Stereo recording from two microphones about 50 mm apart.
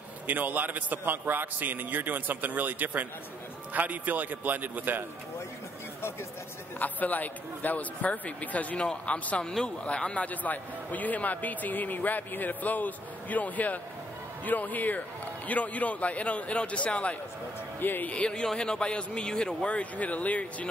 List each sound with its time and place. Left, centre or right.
0.3 s a man's voice: right
6.8 s a man's voice: left
17.7 s a man's voice: left
18.1 s a man's voice: centre